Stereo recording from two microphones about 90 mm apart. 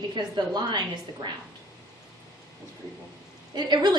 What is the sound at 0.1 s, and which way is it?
Speech, 55° right (ahead or behind).